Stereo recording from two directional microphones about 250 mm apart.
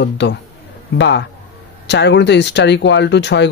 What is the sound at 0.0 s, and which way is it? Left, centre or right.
Speech, left.